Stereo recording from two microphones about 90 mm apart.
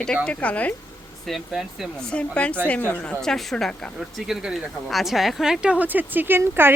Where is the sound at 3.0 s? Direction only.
5° left (ahead or behind).